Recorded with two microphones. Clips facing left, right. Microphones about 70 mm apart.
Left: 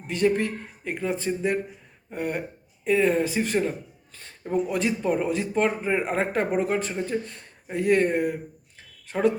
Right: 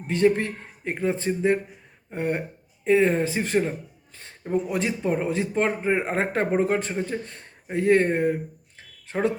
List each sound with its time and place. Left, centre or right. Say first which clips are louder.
0.1 s a man's voice: right 2 dB; right